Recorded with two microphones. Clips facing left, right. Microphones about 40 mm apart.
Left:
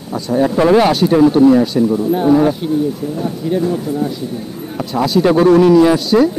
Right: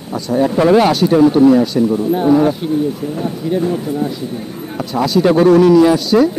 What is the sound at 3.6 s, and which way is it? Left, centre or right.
Speech, centre.